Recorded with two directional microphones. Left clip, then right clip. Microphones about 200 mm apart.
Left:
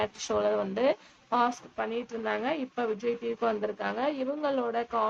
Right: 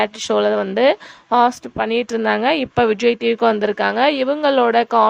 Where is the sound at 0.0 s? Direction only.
45° right (ahead or behind).